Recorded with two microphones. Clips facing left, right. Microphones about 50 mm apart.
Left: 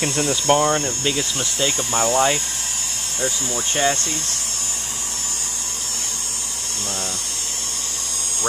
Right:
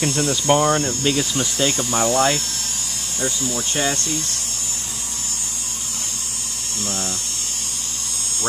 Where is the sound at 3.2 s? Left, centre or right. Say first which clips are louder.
Even; left.